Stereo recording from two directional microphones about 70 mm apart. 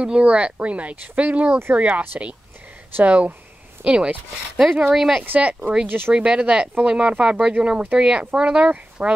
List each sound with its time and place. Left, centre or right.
0.0 s speech: centre
5.2 s speech: right
6.1 s speech: centre